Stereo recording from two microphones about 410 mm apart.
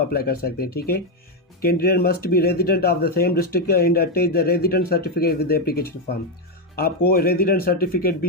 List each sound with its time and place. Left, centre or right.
0.1 s speech: left